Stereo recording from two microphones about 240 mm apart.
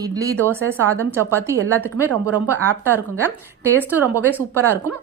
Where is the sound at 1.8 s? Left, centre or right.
Centre.